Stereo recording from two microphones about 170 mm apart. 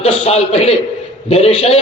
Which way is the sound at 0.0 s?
40° left (ahead or behind).